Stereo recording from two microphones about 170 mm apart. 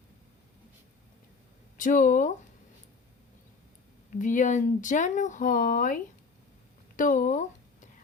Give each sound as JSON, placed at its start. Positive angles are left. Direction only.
{"t": 1.8, "sound": "speech", "side_deg": 50}
{"t": 4.1, "sound": "speech", "side_deg": 50}